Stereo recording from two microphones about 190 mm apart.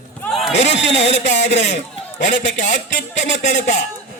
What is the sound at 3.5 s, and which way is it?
Speech, 40° left (ahead or behind).